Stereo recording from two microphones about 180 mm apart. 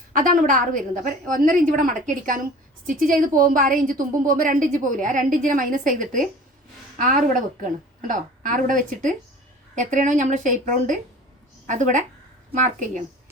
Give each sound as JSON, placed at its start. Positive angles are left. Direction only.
{"t": 0.1, "sound": "a woman's voice", "side_deg": -50}